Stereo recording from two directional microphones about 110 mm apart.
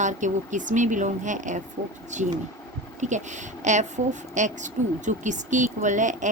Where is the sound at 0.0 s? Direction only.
90° right.